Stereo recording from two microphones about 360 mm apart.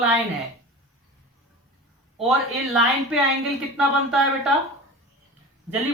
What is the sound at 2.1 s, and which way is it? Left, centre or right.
A woman's voice, centre.